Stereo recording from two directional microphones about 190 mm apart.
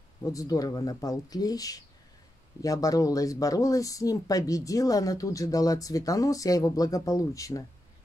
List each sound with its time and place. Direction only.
0.2 s speech: 15° left (ahead or behind)